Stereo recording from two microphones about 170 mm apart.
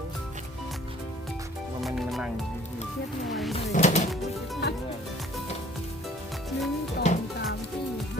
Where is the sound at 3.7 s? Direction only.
45° left (ahead or behind).